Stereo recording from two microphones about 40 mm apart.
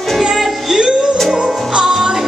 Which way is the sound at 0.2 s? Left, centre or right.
Centre.